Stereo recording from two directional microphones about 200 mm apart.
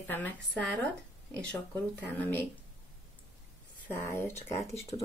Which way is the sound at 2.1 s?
10° left (ahead or behind).